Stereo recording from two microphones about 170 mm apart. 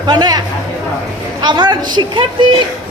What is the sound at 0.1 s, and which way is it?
A woman's voice, 25° right (ahead or behind).